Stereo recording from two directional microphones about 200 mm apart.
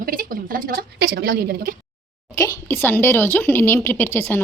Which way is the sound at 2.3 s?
15° left (ahead or behind).